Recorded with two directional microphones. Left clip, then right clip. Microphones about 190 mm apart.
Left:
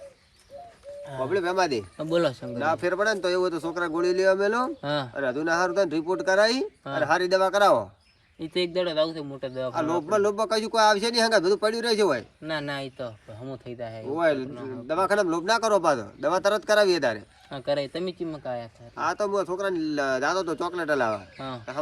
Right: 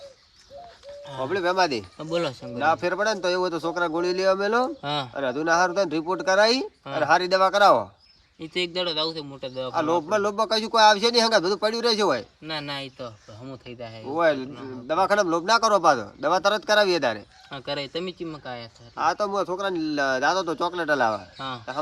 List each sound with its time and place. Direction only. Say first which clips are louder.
1.3 s speech: right 2 dB; 20° right (ahead or behind)
2.8 s speech: right 1 dB; 25° right (ahead or behind)
4.8 s speech: even; 5° left (ahead or behind)
5.1 s speech: right 5 dB; 25° right (ahead or behind)
8.9 s speech: left 1 dB; centre (ahead or behind)
9.7 s speech: right 2 dB; 20° right (ahead or behind)
12.5 s speech: left 2 dB; 5° left (ahead or behind)
14.2 s speech: right 2 dB; 20° right (ahead or behind)
17.5 s speech: left 2 dB; 5° left (ahead or behind)
18.9 s speech: right 2 dB; 25° right (ahead or behind)